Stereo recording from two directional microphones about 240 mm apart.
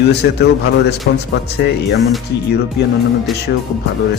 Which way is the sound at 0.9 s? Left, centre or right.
Left.